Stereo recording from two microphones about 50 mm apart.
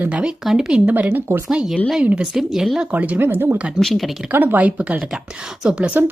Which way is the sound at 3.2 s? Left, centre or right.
Right.